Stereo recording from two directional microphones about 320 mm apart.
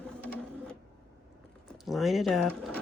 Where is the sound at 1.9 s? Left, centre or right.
Centre.